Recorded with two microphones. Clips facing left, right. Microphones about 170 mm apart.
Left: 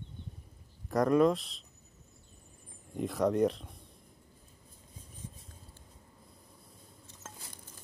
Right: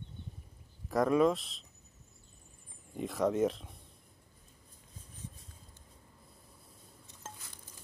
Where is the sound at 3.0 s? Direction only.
Centre (ahead or behind).